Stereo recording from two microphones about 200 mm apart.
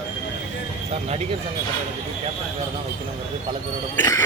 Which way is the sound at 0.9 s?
30° right (ahead or behind).